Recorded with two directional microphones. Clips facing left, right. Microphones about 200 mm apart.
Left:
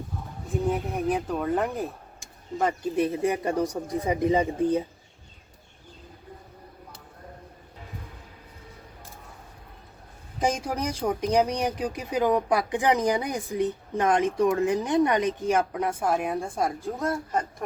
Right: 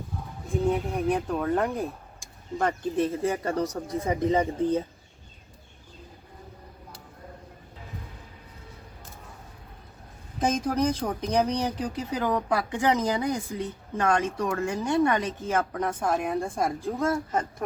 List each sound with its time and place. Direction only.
0.7 s speech: centre (ahead or behind)
10.4 s speech: 10° left (ahead or behind)